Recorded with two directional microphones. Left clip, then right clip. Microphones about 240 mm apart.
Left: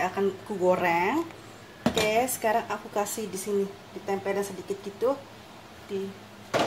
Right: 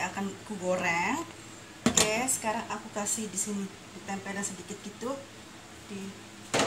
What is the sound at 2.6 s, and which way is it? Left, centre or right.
Speech, left.